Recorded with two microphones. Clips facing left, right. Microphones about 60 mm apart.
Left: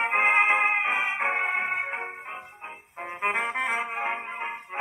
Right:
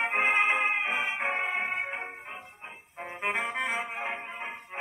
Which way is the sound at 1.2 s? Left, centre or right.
Left.